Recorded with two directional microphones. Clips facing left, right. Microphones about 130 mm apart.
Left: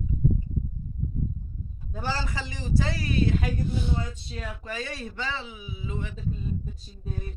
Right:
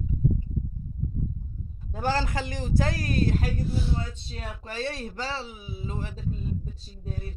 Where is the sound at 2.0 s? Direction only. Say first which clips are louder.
Right 5 dB; 50° right (ahead or behind).